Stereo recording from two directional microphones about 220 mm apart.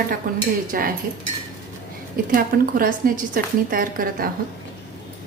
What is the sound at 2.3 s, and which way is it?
A woman's voice, 40° right (ahead or behind).